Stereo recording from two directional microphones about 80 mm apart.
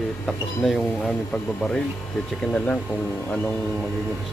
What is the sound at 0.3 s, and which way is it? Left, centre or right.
Speech, centre.